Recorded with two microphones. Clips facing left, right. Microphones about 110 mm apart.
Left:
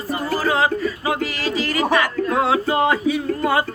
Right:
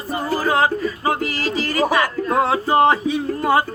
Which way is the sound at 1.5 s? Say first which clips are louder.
Even; 35° right (ahead or behind).